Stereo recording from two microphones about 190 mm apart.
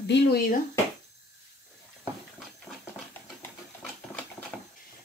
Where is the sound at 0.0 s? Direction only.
65° left (ahead or behind).